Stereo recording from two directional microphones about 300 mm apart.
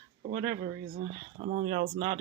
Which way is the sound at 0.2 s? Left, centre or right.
Right.